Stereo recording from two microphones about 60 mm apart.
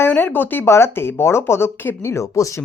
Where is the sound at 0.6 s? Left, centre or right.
Left.